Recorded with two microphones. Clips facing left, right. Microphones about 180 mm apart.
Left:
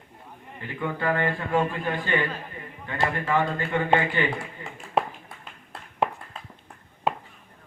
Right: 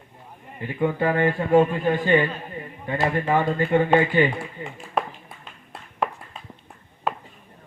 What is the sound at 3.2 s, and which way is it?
Speech, 40° right (ahead or behind).